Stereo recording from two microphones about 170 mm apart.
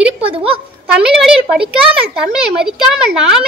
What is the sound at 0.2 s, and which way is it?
Speech, 35° right (ahead or behind).